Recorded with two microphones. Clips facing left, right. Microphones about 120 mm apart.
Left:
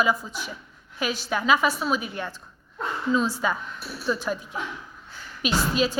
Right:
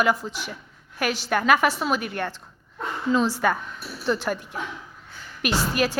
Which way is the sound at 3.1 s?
75° right (ahead or behind).